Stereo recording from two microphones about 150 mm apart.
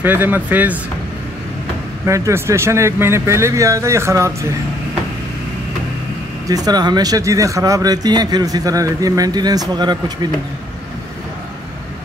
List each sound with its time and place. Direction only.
0.0 s speech: 15° right (ahead or behind)
2.0 s speech: 20° right (ahead or behind)
6.4 s speech: 25° right (ahead or behind)